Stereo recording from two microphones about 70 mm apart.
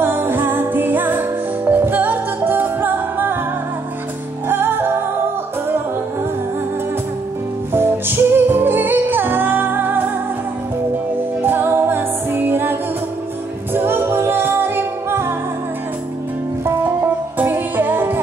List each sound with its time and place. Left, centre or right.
0.0 s music: right
4.5 s music: right
7.7 s music: right
11.4 s music: right
13.7 s music: right
16.6 s music: right